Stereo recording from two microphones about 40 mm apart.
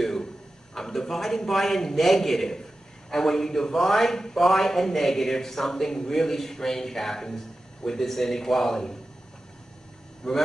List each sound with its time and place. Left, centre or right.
0.7 s a man's voice: centre
10.2 s speech: centre